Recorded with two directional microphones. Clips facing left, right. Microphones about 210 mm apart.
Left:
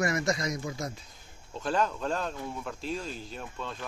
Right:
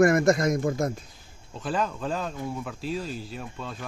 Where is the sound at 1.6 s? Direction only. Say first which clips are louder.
Right 1 dB; 5° right (ahead or behind).